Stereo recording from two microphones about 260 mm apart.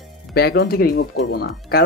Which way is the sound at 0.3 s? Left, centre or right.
Left.